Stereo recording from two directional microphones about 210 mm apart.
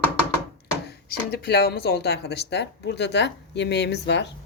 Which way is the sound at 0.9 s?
50° left (ahead or behind).